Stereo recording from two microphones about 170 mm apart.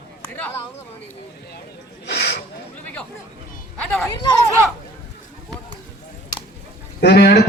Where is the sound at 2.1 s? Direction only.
85° left.